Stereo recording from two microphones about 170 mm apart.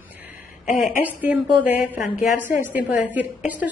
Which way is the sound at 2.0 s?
50° left (ahead or behind).